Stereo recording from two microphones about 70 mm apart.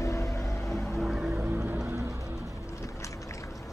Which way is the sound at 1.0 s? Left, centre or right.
Centre.